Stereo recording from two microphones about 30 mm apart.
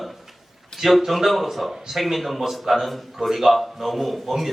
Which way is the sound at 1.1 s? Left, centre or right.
Centre.